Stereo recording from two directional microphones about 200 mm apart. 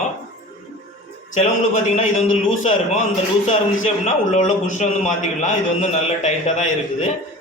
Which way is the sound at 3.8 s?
35° left (ahead or behind).